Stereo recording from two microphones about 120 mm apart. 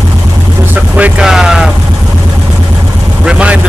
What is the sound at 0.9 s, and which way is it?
Vehicle, 10° right (ahead or behind).